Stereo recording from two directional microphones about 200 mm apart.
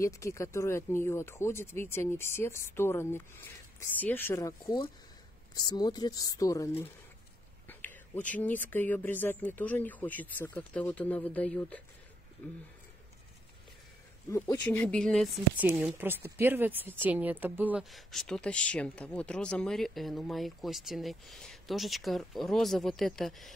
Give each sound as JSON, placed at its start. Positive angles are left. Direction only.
{"t": 0.0, "sound": "a woman's voice", "side_deg": 15}
{"t": 14.3, "sound": "speech", "side_deg": 10}
{"t": 15.6, "sound": "speech", "side_deg": -10}